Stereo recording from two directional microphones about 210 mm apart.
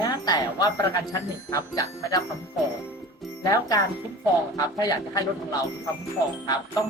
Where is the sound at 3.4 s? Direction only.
15° left (ahead or behind).